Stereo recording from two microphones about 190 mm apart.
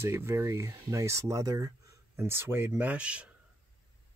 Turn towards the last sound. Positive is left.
turn(degrees=-5)  # may be behind; listen again after turning